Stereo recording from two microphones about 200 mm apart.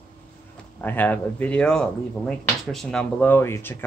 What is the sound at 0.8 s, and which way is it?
Speech, 10° left (ahead or behind).